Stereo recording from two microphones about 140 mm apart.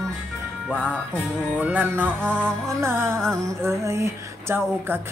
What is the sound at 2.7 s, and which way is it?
Music, 20° right (ahead or behind).